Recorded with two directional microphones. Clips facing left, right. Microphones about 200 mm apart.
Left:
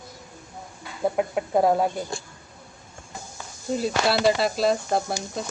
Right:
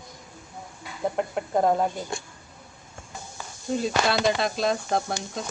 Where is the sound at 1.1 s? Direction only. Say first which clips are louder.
Left 2 dB; 5° left (ahead or behind).